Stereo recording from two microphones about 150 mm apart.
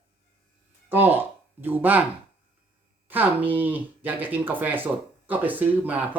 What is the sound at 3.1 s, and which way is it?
Speech, 10° right (ahead or behind).